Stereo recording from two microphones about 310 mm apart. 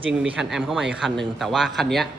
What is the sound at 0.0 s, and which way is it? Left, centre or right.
A man's voice, centre.